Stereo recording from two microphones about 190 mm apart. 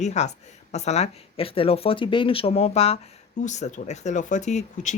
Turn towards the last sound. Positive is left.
turn(degrees=40)  # may be behind; listen again after turning